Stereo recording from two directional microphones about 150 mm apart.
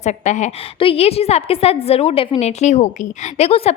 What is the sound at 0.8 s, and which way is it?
A woman's voice, 40° left (ahead or behind).